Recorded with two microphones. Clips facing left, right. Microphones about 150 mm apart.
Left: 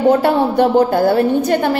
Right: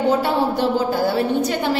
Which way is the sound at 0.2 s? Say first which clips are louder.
Left 6 dB; 60° left (ahead or behind).